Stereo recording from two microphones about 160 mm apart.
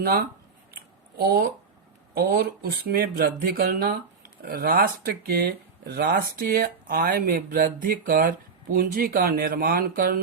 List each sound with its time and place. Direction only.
0.0 s speech: 70° right (ahead or behind)